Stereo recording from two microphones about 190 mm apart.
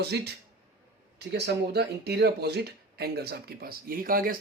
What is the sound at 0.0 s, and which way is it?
Speech, 60° right (ahead or behind).